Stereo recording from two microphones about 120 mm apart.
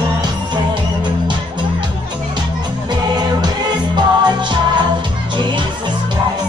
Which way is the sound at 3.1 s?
35° right (ahead or behind).